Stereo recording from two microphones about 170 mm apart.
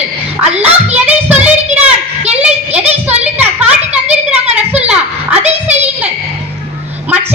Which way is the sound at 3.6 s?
5° right (ahead or behind).